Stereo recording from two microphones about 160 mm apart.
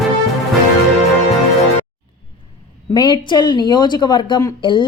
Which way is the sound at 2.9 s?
30° left (ahead or behind).